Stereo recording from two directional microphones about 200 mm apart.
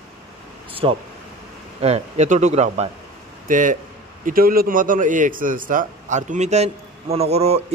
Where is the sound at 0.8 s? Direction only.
25° right (ahead or behind).